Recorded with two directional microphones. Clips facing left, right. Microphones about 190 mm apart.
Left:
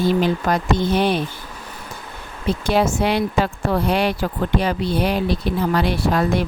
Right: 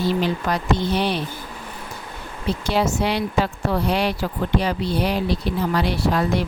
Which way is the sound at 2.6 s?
50° left (ahead or behind).